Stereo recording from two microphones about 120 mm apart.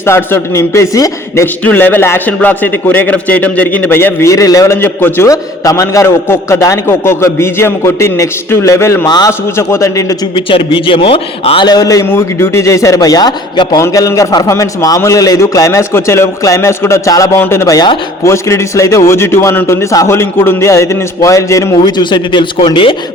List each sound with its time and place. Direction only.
0.0 s a man's voice: 20° left (ahead or behind)
1.6 s a man's voice: 15° left (ahead or behind); by 9.3 s 35° left (ahead or behind)
9.6 s a man's voice: 25° left (ahead or behind)
10.3 s a man's voice: 45° left (ahead or behind)
11.7 s a man's voice: 30° left (ahead or behind)